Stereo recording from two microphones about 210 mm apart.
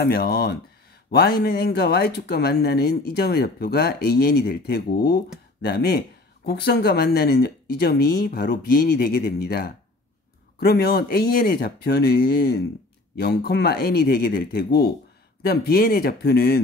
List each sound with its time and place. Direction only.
0.0 s speech: 50° left (ahead or behind)